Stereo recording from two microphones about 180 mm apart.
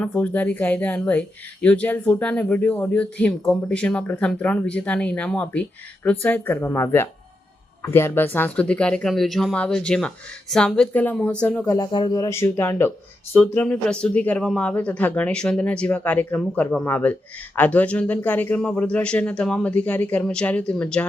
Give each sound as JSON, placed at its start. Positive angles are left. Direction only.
{"t": 0.0, "sound": "speech", "side_deg": 10}
{"t": 11.6, "sound": "speech", "side_deg": 20}